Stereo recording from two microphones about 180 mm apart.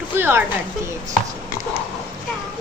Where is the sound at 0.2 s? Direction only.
15° right (ahead or behind).